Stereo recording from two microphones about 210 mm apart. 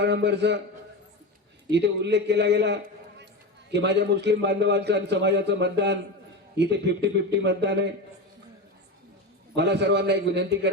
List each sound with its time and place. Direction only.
0.0 s a man's voice: 55° right (ahead or behind)
1.7 s a man's voice: 55° right (ahead or behind)
9.6 s a man's voice: 55° right (ahead or behind)